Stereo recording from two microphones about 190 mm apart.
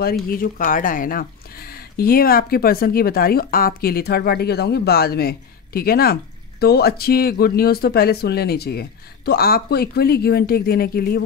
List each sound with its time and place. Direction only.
0.3 s speech: 45° left (ahead or behind)